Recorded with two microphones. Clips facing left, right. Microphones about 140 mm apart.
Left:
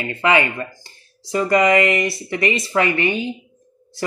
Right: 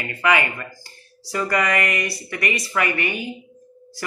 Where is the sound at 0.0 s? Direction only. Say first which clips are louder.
Left 3 dB; 25° left (ahead or behind).